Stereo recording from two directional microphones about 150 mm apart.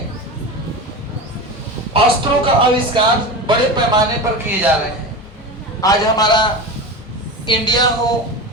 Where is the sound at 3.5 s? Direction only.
30° right (ahead or behind).